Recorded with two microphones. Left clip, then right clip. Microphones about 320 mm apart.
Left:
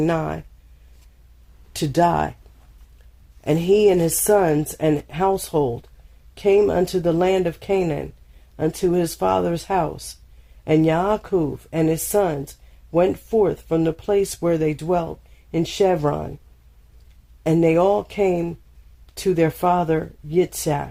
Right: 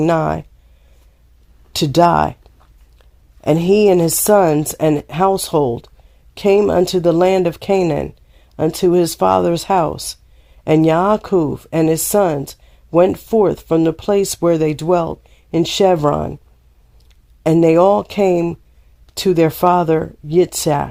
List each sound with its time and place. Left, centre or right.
0.0 s speech: right
1.7 s speech: right
3.4 s speech: right
17.4 s speech: right